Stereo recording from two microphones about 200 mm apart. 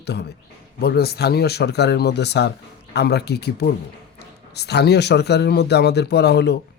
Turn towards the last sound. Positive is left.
turn(degrees=55)  # may be behind; listen again after turning